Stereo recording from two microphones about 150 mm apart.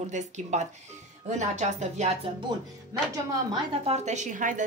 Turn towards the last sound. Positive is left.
turn(degrees=-60)  # may be behind; listen again after turning